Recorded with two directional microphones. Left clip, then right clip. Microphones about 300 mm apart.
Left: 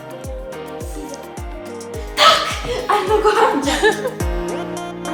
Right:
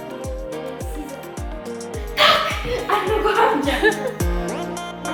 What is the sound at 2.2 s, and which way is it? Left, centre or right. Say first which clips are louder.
Music: left 3 dB; left.